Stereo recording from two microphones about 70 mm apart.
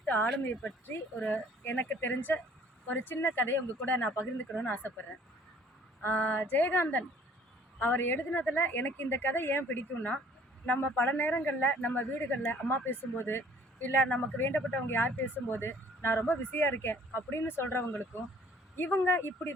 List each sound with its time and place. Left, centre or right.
0.0 s speech: left
6.0 s speech: left